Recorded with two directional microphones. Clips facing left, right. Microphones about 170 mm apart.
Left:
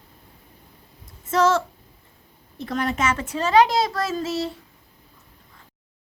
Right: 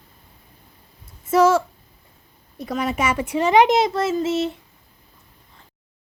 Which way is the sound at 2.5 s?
10° right (ahead or behind).